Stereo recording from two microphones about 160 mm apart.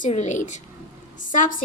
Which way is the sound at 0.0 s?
45° left (ahead or behind).